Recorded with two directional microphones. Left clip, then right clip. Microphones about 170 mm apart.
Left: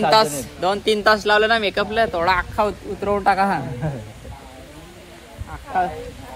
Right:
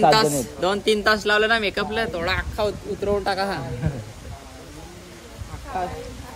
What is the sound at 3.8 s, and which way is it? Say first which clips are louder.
Speech: left 3 dB; 5° right (ahead or behind).